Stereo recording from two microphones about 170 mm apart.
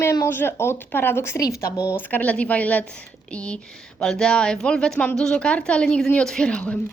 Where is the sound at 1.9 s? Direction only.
10° left (ahead or behind).